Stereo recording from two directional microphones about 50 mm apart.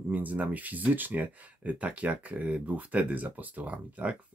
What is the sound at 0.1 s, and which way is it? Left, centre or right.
Speech, right.